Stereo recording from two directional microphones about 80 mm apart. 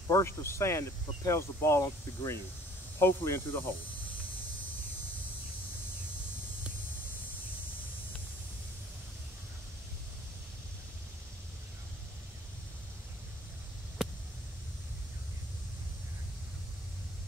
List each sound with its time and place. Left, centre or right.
0.2 s speech: left